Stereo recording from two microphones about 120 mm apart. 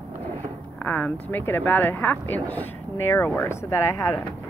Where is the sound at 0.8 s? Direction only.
15° left (ahead or behind).